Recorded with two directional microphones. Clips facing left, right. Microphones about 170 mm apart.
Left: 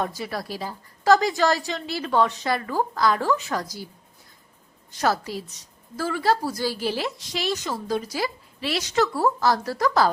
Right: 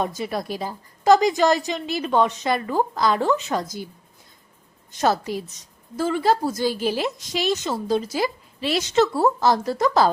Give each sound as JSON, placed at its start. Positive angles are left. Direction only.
{"t": 0.0, "sound": "a woman's voice", "side_deg": -20}
{"t": 4.9, "sound": "a woman's voice", "side_deg": -20}